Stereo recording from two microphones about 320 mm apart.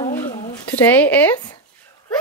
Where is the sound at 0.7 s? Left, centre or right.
Centre.